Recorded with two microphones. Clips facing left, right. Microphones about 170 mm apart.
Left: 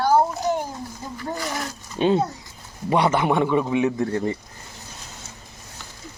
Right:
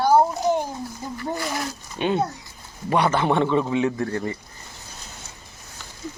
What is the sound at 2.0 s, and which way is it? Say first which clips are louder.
Speech: left 4 dB; 35° left (ahead or behind).